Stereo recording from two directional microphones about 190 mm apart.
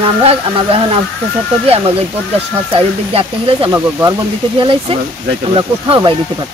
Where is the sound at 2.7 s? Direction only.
30° right (ahead or behind).